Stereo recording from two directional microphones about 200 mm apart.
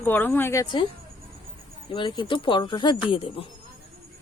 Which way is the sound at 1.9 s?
25° left (ahead or behind).